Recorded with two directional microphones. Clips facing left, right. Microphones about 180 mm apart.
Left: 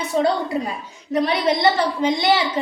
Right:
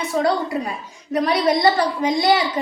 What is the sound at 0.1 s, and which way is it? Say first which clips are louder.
Speech: left 1 dB; 25° left (ahead or behind).